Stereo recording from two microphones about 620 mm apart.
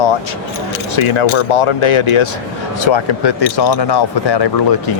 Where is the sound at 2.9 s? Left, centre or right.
Left.